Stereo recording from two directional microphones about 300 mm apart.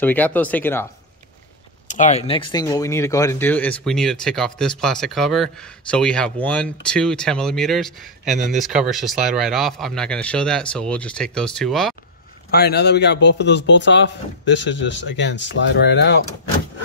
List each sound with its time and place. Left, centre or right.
0.0 s speech: centre
1.9 s speech: left; by 11.9 s centre
12.4 s speech: left